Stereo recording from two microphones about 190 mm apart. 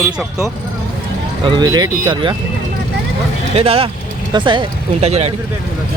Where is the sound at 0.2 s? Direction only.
15° right (ahead or behind).